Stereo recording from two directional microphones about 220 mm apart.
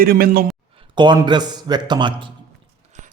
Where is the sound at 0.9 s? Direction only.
20° right (ahead or behind).